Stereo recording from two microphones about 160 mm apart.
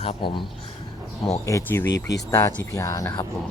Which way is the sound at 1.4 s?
15° left (ahead or behind).